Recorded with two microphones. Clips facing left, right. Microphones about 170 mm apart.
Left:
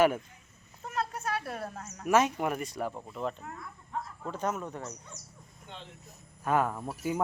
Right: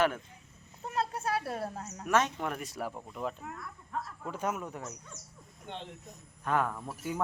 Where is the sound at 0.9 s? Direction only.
30° right (ahead or behind).